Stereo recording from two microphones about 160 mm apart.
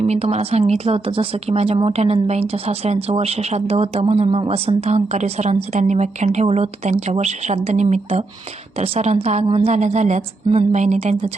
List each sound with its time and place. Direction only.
0.0 s a woman's voice: 40° right (ahead or behind)